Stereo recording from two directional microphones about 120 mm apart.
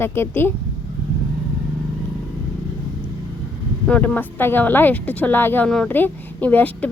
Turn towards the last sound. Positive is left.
turn(degrees=10)  # may be behind; listen again after turning